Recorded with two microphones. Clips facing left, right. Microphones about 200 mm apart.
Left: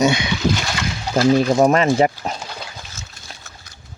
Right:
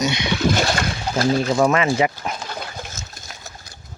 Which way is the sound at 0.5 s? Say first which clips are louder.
Right 3 dB; 55° right (ahead or behind).